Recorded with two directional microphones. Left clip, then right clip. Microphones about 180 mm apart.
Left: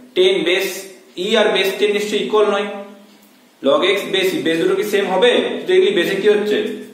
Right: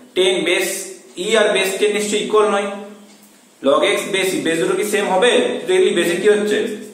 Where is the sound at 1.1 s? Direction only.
15° left (ahead or behind).